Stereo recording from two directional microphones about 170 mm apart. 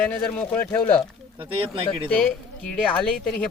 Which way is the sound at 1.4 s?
30° right (ahead or behind).